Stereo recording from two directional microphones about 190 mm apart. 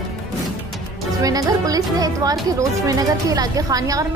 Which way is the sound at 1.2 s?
20° right (ahead or behind).